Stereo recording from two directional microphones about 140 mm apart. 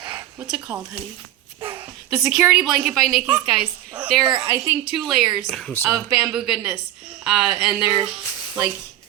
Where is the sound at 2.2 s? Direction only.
5° right (ahead or behind).